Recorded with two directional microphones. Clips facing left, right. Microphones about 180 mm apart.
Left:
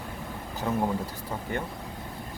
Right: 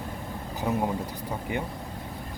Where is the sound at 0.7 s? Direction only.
15° right (ahead or behind).